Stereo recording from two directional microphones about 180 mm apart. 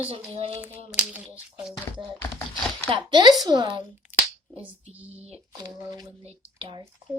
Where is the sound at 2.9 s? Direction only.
25° right (ahead or behind).